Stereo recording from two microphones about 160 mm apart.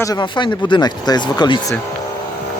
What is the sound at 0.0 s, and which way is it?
Speech, 25° left (ahead or behind).